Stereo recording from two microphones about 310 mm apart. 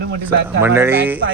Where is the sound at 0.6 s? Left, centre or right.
Centre.